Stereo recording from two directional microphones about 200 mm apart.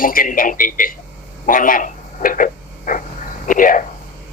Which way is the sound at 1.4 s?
45° left (ahead or behind).